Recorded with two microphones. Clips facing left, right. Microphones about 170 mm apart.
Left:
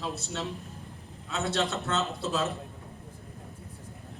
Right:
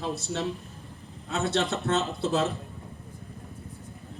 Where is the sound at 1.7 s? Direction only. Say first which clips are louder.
Right 4 dB; 65° right (ahead or behind).